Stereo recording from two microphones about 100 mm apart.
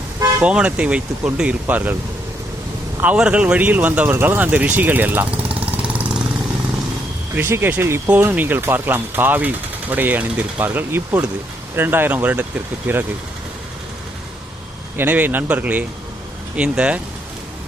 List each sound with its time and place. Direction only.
0.4 s speech: 10° right (ahead or behind)
3.0 s speech: 10° right (ahead or behind)
7.3 s speech: 20° right (ahead or behind)
14.9 s speech: 15° right (ahead or behind)